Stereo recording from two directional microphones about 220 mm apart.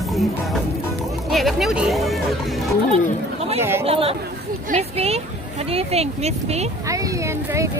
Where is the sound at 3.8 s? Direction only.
25° right (ahead or behind).